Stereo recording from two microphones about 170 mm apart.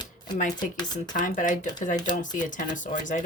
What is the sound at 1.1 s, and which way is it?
Speech, 50° left (ahead or behind).